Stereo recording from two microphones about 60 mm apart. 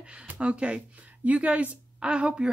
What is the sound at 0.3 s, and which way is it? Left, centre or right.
Speech, right.